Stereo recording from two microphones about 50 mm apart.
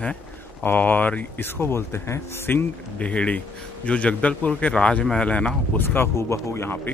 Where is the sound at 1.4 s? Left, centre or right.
Left.